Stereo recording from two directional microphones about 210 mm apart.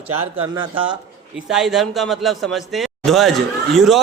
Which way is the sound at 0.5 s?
25° right (ahead or behind).